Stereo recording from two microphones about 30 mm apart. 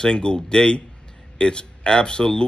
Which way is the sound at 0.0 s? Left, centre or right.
Left.